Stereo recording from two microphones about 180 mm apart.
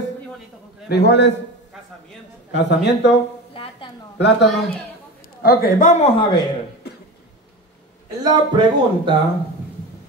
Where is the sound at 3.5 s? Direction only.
30° left (ahead or behind).